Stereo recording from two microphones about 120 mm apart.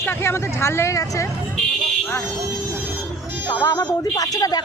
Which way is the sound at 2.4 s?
25° right (ahead or behind).